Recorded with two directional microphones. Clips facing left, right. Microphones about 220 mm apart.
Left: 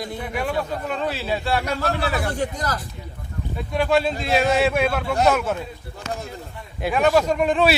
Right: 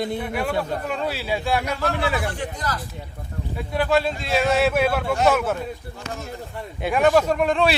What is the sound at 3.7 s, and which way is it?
A man's voice, centre (ahead or behind).